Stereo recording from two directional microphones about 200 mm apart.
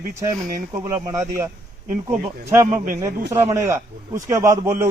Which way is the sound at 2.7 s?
40° right (ahead or behind).